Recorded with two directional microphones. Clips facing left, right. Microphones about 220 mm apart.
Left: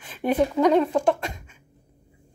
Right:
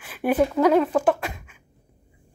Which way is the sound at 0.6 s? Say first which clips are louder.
Even; 5° right (ahead or behind).